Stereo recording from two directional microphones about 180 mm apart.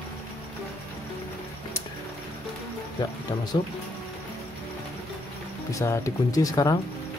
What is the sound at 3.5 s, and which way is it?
Speech, 25° left (ahead or behind).